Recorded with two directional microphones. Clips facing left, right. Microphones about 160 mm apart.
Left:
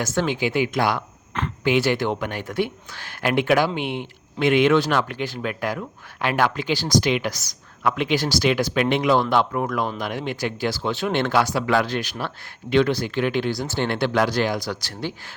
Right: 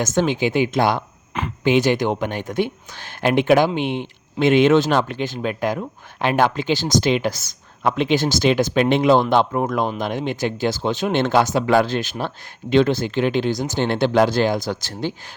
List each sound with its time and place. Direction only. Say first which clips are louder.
0.0 s speech: right 4 dB; 20° right (ahead or behind)